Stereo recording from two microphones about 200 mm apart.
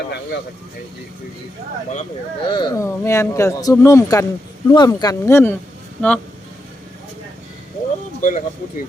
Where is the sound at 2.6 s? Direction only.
15° left (ahead or behind).